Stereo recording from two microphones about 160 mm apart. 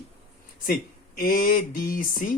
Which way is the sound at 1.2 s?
65° left (ahead or behind).